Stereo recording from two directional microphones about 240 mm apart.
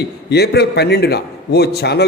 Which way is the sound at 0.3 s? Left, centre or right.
Left.